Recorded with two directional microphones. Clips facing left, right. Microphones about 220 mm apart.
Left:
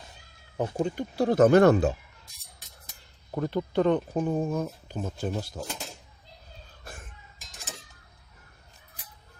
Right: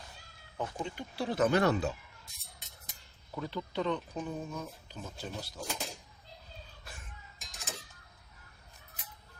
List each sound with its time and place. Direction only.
0.5 s speech: 45° left (ahead or behind)
3.3 s speech: 50° left (ahead or behind)
6.8 s a sound: 50° left (ahead or behind)